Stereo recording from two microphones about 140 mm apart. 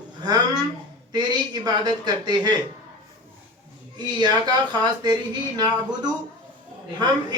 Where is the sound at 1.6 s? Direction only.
30° right (ahead or behind).